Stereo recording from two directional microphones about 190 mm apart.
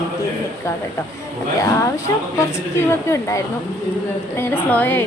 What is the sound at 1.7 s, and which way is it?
A woman's voice, 15° left (ahead or behind).